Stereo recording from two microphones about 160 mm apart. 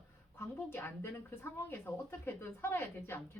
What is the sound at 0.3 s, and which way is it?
A woman's voice, 15° left (ahead or behind).